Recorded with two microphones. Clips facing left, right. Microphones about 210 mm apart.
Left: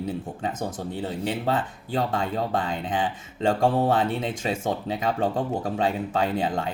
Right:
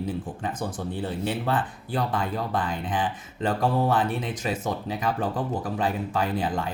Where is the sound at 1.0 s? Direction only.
25° left (ahead or behind).